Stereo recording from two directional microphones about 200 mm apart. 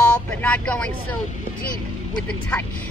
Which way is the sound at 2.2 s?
5° left (ahead or behind).